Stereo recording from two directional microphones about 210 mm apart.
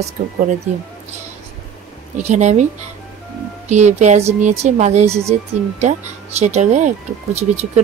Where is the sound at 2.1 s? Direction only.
35° right (ahead or behind).